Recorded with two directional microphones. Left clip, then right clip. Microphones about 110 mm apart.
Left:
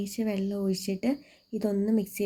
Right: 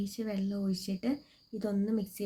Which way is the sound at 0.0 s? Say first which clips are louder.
Left 5 dB; 30° left (ahead or behind).